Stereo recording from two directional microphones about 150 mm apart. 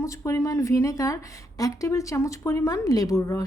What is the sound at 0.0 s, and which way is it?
Speech, 20° left (ahead or behind).